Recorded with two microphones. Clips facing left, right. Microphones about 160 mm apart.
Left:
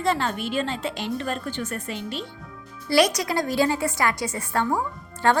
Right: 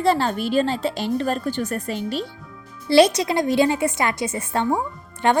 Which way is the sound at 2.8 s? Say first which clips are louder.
Right 5 dB; 30° right (ahead or behind).